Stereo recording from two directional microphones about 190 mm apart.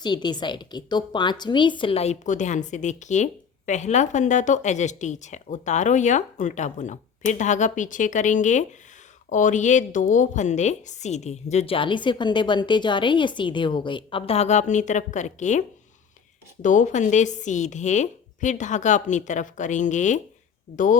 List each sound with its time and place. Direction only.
0.0 s a woman's voice: 25° left (ahead or behind); by 15.6 s 40° left (ahead or behind)
16.6 s a woman's voice: 40° left (ahead or behind)